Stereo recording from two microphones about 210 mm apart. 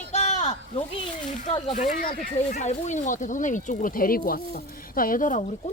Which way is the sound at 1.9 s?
40° left (ahead or behind).